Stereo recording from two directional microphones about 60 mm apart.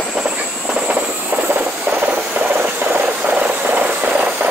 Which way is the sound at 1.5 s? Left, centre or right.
Right.